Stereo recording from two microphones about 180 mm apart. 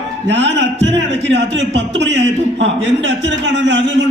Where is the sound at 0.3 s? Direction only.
85° right.